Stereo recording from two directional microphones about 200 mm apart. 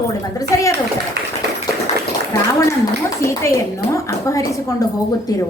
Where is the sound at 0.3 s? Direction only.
15° left (ahead or behind).